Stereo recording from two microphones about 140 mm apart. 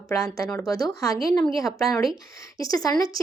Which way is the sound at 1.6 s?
Centre (ahead or behind).